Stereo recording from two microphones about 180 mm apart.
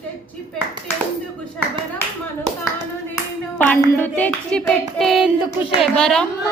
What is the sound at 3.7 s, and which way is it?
Hands, 10° left (ahead or behind).